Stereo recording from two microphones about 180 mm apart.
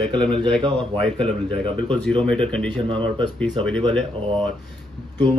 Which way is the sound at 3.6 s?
30° right (ahead or behind).